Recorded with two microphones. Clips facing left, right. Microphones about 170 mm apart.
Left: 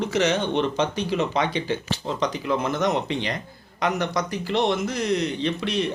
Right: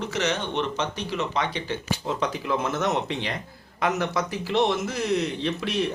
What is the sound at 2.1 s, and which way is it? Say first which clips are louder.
A man's voice: left 2 dB; 5° right (ahead or behind).